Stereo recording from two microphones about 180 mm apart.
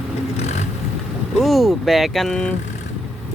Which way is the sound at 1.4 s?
Centre (ahead or behind).